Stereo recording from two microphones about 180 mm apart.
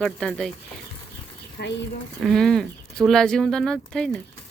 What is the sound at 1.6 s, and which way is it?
Speech, 70° left (ahead or behind).